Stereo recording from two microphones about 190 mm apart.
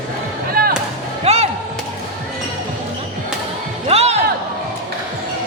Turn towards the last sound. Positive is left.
turn(degrees=-35)  # may be behind; listen again after turning